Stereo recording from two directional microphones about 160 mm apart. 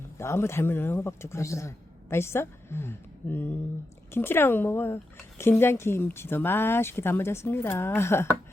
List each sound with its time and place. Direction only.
0.2 s a man's voice: 15° left (ahead or behind)